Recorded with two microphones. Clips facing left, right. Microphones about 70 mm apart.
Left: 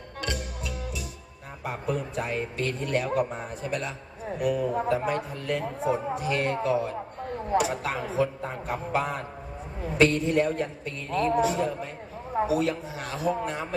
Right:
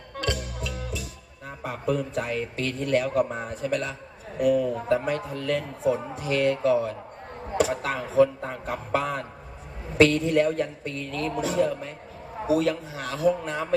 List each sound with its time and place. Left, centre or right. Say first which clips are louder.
0.2 s music: right 3 dB; left
1.6 s a man's voice: right 3 dB; left
7.6 s speech: right 4 dB; right
7.9 s a man's voice: right 6 dB; left
10.0 s a man's voice: right 3 dB; left